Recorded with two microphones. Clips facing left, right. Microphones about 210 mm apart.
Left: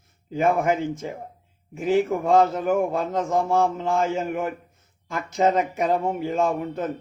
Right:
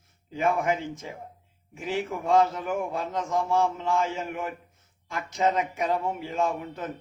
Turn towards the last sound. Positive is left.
turn(degrees=45)  # may be behind; listen again after turning